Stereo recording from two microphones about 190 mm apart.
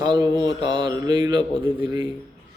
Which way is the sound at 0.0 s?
20° right (ahead or behind).